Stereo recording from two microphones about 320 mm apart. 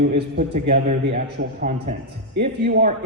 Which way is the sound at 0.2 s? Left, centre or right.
Right.